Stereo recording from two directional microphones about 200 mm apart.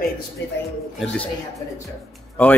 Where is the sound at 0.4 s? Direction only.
60° left (ahead or behind).